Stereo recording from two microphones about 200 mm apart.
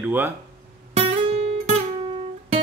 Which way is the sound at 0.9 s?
30° right (ahead or behind).